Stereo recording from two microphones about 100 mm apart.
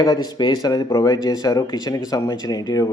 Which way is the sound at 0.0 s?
45° left (ahead or behind).